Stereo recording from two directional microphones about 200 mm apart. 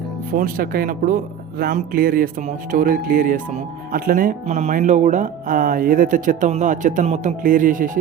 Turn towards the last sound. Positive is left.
turn(degrees=-40)  # may be behind; listen again after turning